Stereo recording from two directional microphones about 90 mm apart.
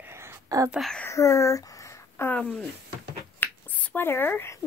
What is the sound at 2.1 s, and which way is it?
Speech, 25° left (ahead or behind).